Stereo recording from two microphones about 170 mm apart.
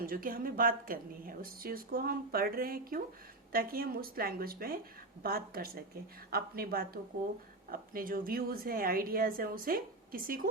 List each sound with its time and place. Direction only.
0.0 s a woman's voice: 55° right (ahead or behind)